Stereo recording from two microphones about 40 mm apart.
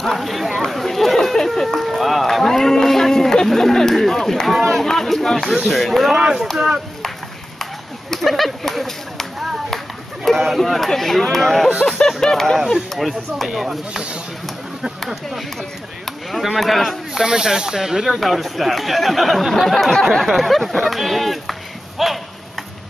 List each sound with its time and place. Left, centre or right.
0.2 s chatter: centre
2.4 s speech: centre
3.9 s run: centre
4.6 s a sound: centre
5.5 s speech: centre
6.1 s speech: centre
8.1 s a sound: centre
10.2 s speech: centre
12.2 s speech: centre
13.5 s speech: centre
16.1 s speech: centre
17.2 s speech: centre